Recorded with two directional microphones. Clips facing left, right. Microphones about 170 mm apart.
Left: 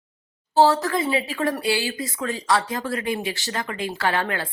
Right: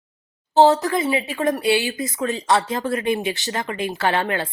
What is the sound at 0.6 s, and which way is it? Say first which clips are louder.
Speech: right 3 dB; 20° right (ahead or behind).